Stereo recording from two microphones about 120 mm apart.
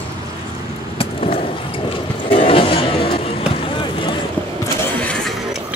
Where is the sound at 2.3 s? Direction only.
50° left (ahead or behind).